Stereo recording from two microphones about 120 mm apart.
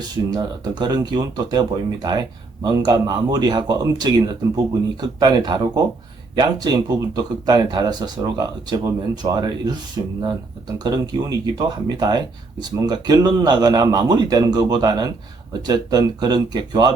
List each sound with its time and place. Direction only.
0.3 s speech: 35° right (ahead or behind)